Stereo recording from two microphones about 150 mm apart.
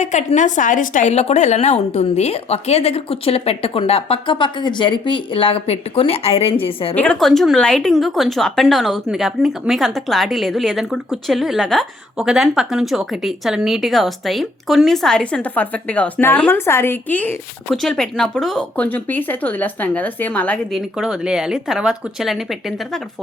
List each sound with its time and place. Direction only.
0.0 s a woman's voice: 50° left (ahead or behind)
6.9 s speech: 5° left (ahead or behind)